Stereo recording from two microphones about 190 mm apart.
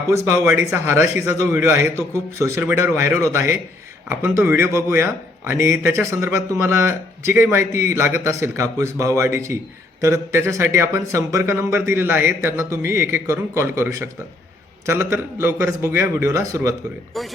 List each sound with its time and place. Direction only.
0.1 s speech: 15° right (ahead or behind)
17.2 s speech: centre (ahead or behind)